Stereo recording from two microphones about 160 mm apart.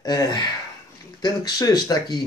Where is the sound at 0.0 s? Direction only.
25° left (ahead or behind).